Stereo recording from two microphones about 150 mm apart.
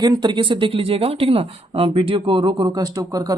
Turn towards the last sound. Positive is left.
turn(degrees=-25)  # may be behind; listen again after turning